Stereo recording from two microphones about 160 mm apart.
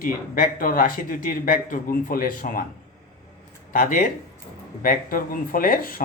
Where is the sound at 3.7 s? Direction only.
60° left (ahead or behind).